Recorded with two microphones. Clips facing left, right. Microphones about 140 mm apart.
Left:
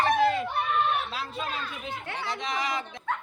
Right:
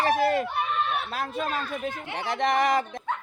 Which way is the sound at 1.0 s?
55° right (ahead or behind).